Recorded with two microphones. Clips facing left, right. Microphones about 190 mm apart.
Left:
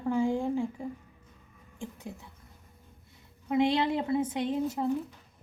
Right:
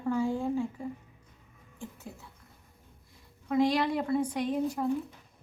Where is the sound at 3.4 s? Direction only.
25° left (ahead or behind).